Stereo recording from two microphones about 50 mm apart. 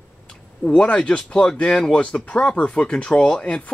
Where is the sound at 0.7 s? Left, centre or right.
Left.